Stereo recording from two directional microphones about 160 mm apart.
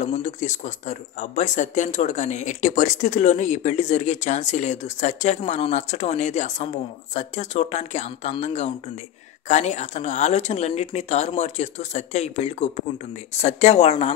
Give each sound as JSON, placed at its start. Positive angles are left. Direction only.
{"t": 0.0, "sound": "speech", "side_deg": 50}